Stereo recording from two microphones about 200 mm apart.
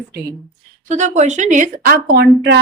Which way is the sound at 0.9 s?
35° right (ahead or behind).